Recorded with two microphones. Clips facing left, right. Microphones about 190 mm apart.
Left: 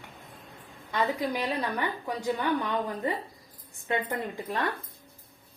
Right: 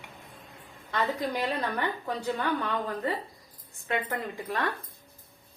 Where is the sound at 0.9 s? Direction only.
10° left (ahead or behind).